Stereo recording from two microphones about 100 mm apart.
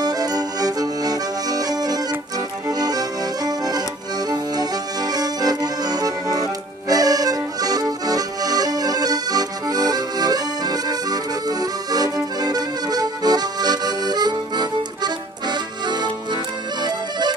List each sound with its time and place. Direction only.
0.0 s accordion: 40° right (ahead or behind)